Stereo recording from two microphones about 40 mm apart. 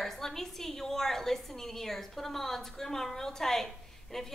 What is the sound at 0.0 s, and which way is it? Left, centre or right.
A woman's voice, centre.